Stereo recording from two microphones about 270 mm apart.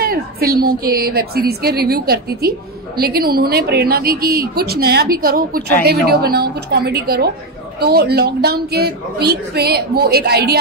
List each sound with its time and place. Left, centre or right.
0.0 s speech: right